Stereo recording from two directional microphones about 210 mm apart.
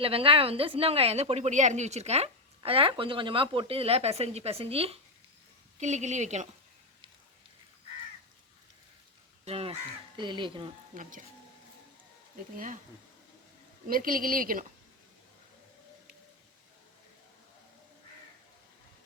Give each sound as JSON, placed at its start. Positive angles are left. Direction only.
{"t": 0.0, "sound": "a woman's voice", "side_deg": -25}
{"t": 9.4, "sound": "a woman's voice", "side_deg": -30}
{"t": 10.9, "sound": "speech", "side_deg": -40}
{"t": 12.5, "sound": "speech", "side_deg": -40}
{"t": 13.8, "sound": "speech", "side_deg": -40}